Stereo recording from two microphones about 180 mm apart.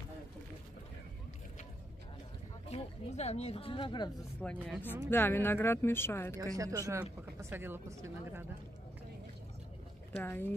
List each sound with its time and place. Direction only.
2.7 s speech: 35° left (ahead or behind)
4.4 s speech: 5° left (ahead or behind)
6.3 s speech: 20° right (ahead or behind)
10.1 s speech: 10° left (ahead or behind)